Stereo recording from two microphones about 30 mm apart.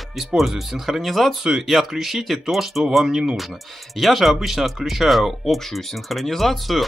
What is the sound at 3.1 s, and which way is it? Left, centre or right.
Speech, centre.